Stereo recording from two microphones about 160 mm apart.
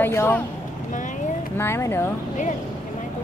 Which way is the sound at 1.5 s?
15° left (ahead or behind).